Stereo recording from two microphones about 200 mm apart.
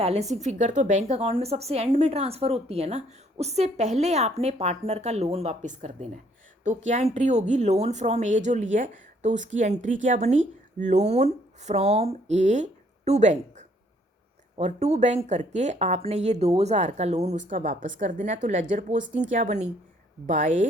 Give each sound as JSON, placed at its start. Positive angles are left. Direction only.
{"t": 0.0, "sound": "a woman's voice", "side_deg": -30}